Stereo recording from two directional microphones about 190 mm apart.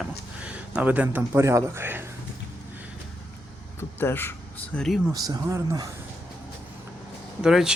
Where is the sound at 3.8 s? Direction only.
10° left (ahead or behind).